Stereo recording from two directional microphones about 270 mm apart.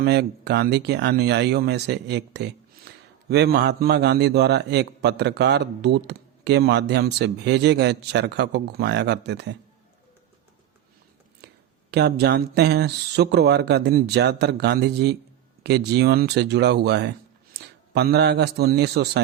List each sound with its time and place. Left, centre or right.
0.0 s a man's voice: right
11.9 s a man's voice: right